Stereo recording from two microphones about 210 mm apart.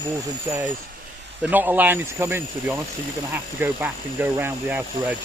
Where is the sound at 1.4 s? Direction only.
10° right (ahead or behind).